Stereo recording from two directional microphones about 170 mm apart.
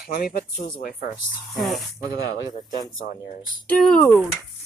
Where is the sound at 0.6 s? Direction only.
55° left (ahead or behind).